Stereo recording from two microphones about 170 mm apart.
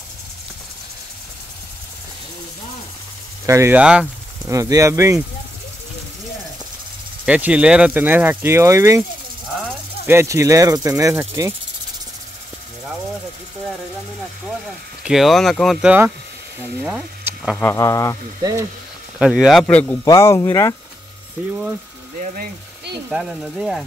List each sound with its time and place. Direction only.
3.4 s speech: 15° right (ahead or behind)
4.5 s speech: 20° right (ahead or behind)
7.2 s speech: 10° right (ahead or behind)
10.0 s speech: 15° right (ahead or behind)
15.0 s speech: centre (ahead or behind)
17.6 s speech: 15° left (ahead or behind)
18.4 s speech: 20° right (ahead or behind)
19.1 s speech: 5° right (ahead or behind); by 20.7 s 15° left (ahead or behind)
22.2 s speech: 50° right (ahead or behind)
23.0 s speech: 5° right (ahead or behind)